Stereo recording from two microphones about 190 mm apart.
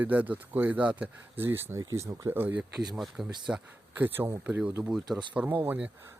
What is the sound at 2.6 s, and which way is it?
Speech, centre (ahead or behind).